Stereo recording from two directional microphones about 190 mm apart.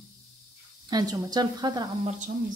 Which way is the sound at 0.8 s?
20° right (ahead or behind).